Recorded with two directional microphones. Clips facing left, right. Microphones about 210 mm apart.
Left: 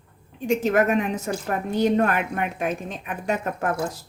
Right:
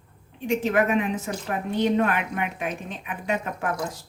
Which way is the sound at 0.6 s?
45° left (ahead or behind).